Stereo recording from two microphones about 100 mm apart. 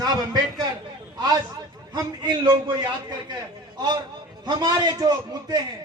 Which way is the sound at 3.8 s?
45° right (ahead or behind).